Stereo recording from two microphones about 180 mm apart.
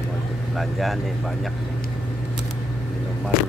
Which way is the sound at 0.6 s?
Centre (ahead or behind).